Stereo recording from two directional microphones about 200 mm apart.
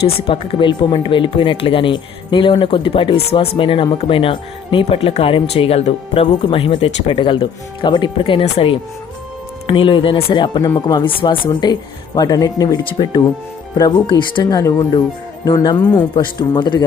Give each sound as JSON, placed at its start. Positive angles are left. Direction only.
{"t": 0.3, "sound": "speech", "side_deg": 25}